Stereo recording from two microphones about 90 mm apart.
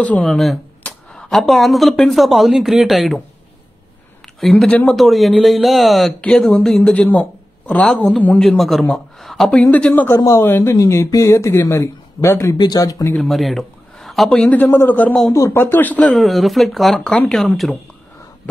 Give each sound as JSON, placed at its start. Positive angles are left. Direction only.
{"t": 0.0, "sound": "speech", "side_deg": 10}
{"t": 0.8, "sound": "a sound", "side_deg": 5}
{"t": 2.0, "sound": "speech", "side_deg": 0}
{"t": 4.4, "sound": "speech", "side_deg": 0}
{"t": 4.6, "sound": "speech", "side_deg": 15}
{"t": 4.9, "sound": "speech", "side_deg": 0}
{"t": 8.4, "sound": "speech", "side_deg": 0}
{"t": 9.5, "sound": "speech", "side_deg": 15}
{"t": 10.0, "sound": "a man's voice", "side_deg": 35}
{"t": 12.5, "sound": "speech", "side_deg": 50}
{"t": 13.2, "sound": "a sound", "side_deg": 0}
{"t": 14.3, "sound": "a man's voice", "side_deg": 15}
{"t": 15.3, "sound": "a man's voice", "side_deg": 30}
{"t": 16.1, "sound": "speech", "side_deg": 0}